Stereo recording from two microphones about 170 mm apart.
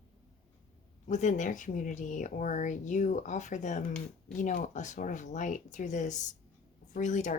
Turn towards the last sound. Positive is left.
turn(degrees=45)  # may be behind; listen again after turning